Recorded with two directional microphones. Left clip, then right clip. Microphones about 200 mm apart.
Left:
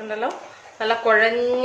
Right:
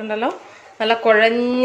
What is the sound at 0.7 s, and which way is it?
Speech, 45° right (ahead or behind).